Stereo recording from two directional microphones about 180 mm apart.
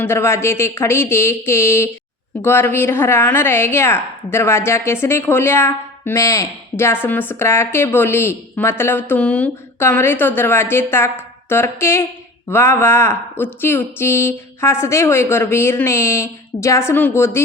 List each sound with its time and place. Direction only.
0.0 s a woman's voice: 15° left (ahead or behind)